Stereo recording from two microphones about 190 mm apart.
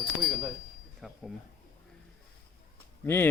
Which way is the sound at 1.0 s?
Centre (ahead or behind).